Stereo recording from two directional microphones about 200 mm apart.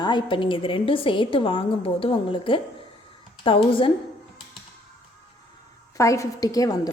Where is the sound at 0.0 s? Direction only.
20° left (ahead or behind).